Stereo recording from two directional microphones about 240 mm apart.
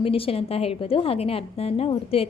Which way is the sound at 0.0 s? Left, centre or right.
Left.